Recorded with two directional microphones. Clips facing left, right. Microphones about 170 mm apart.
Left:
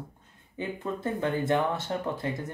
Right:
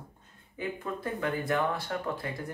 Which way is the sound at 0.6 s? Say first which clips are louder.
Left 2 dB; 25° left (ahead or behind).